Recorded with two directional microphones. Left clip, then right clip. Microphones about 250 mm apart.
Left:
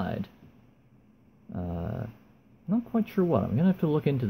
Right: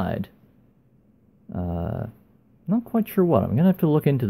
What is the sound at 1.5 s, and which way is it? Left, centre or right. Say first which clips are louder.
Speech: right 6 dB; centre.